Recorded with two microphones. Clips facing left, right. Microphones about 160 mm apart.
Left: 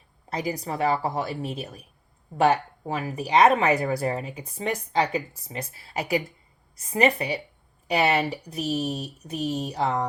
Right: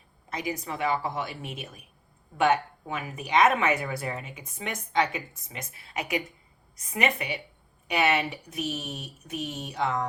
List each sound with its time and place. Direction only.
0.3 s speech: 35° left (ahead or behind)